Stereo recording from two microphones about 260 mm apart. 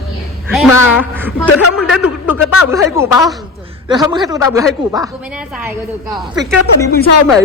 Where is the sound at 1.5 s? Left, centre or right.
Left.